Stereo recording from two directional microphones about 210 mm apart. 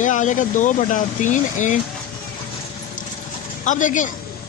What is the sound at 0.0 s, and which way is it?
Speech, 35° left (ahead or behind).